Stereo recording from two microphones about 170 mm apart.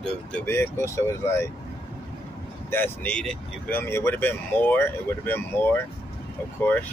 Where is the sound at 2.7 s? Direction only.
10° left (ahead or behind).